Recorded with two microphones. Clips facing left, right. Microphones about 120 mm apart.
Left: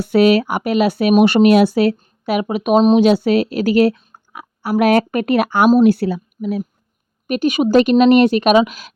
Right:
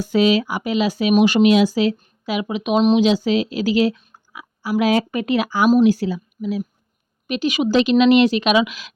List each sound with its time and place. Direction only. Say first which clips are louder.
0.0 s speech: left 4 dB; 60° left (ahead or behind)